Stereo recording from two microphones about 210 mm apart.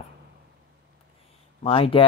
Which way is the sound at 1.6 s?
25° left (ahead or behind).